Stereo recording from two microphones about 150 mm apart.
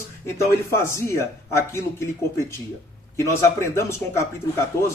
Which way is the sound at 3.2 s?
15° left (ahead or behind).